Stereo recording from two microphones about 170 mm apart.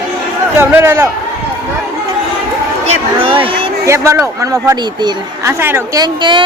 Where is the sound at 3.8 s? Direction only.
15° right (ahead or behind).